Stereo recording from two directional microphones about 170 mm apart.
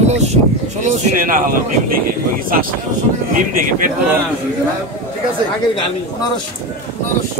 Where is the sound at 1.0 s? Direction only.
55° right (ahead or behind).